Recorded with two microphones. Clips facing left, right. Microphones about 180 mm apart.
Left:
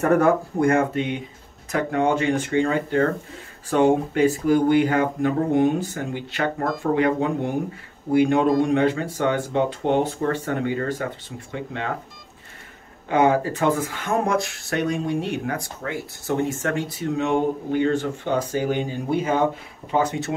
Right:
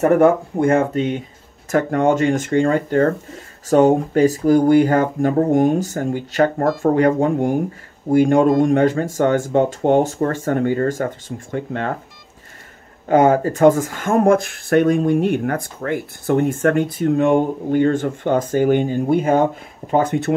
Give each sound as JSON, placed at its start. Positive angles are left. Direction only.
{"t": 0.0, "sound": "speech", "side_deg": -25}
{"t": 0.9, "sound": "speech", "side_deg": -40}
{"t": 13.1, "sound": "speech", "side_deg": -45}